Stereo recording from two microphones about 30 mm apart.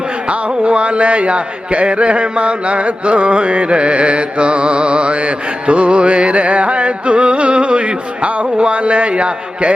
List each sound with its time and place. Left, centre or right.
0.3 s speech: right